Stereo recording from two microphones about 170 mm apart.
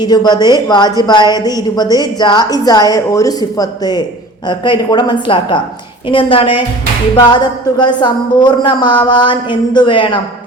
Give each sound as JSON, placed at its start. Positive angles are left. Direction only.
{"t": 0.0, "sound": "a woman's voice", "side_deg": 25}